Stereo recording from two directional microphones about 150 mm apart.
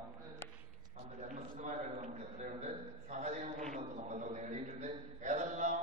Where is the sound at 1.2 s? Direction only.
55° right (ahead or behind).